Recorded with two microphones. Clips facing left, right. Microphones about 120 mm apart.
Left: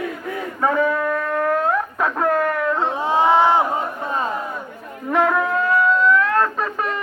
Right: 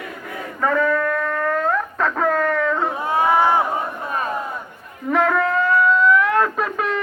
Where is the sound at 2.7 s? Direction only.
20° left (ahead or behind).